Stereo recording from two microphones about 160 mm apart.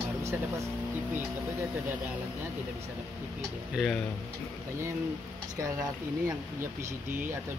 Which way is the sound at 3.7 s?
Centre (ahead or behind).